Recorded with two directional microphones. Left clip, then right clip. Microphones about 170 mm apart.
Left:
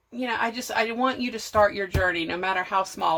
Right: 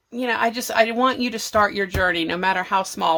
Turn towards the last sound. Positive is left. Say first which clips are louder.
# right 3 dB
turn(degrees=-45)  # may be behind; listen again after turning